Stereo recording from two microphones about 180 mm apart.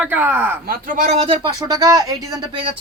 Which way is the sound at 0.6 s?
50° right (ahead or behind).